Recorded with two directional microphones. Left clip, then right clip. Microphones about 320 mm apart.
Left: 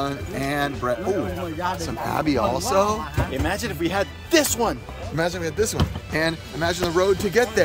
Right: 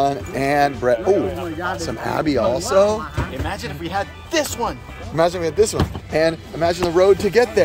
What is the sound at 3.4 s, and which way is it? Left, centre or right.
Speech, left.